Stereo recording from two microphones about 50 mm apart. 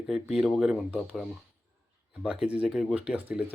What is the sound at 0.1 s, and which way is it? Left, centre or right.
Speech, centre.